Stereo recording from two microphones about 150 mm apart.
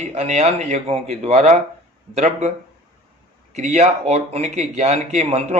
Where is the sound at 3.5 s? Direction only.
50° right (ahead or behind).